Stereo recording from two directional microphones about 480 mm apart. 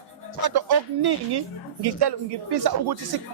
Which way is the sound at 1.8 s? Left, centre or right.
Right.